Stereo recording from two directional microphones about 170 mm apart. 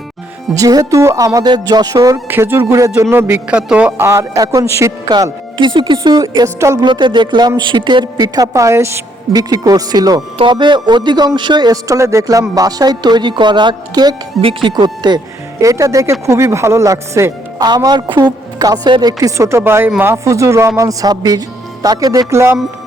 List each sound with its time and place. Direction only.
0.5 s speech: 20° right (ahead or behind)